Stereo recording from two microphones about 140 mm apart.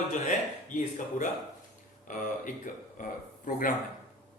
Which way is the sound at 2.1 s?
70° left (ahead or behind).